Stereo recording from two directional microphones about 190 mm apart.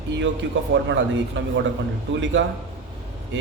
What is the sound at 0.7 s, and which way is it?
A man's voice, 65° right (ahead or behind).